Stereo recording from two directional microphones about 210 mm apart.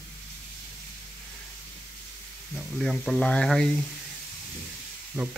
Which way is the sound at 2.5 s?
Centre (ahead or behind).